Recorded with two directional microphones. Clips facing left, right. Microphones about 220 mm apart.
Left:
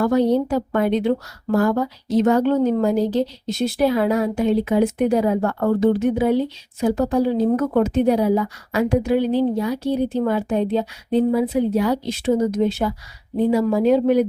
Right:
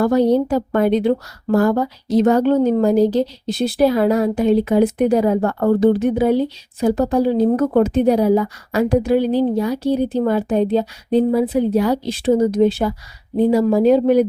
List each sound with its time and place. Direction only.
0.0 s a woman's voice: 35° right (ahead or behind)